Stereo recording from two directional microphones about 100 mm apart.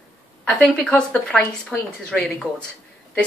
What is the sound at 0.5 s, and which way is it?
A woman's voice, 10° left (ahead or behind).